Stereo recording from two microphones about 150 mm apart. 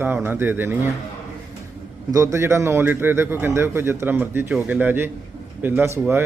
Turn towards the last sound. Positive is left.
turn(degrees=-15)  # may be behind; listen again after turning